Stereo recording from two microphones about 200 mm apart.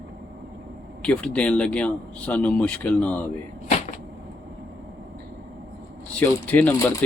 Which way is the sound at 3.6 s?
35° left (ahead or behind).